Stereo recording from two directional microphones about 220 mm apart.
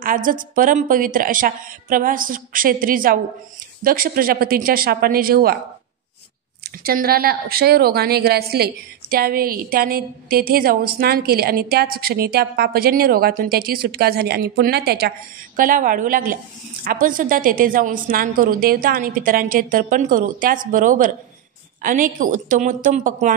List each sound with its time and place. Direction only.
0.0 s a woman's voice: 40° right (ahead or behind)
6.6 s a woman's voice: 45° right (ahead or behind)